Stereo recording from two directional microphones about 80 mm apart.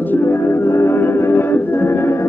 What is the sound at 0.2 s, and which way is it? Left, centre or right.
Music, left.